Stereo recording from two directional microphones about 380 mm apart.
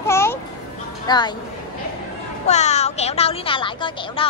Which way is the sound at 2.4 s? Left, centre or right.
Centre.